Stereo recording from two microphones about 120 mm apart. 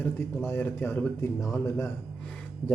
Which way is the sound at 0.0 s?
15° left (ahead or behind).